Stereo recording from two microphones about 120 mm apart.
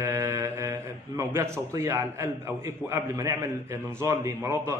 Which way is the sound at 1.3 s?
20° right (ahead or behind).